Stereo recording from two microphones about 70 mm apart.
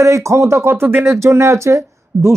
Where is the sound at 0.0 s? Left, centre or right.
Right.